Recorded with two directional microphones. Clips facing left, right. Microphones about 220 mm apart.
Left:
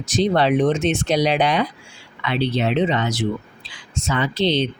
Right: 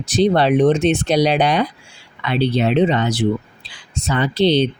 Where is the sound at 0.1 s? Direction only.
35° right (ahead or behind).